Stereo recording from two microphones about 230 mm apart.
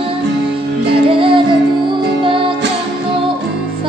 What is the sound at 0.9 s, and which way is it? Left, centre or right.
Music, right.